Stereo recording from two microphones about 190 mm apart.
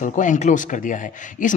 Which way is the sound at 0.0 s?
40° left (ahead or behind).